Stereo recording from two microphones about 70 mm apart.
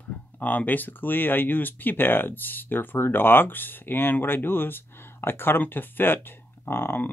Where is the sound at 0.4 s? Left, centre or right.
Left.